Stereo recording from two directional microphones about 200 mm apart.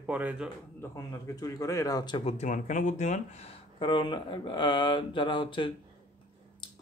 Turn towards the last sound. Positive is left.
turn(degrees=25)  # may be behind; listen again after turning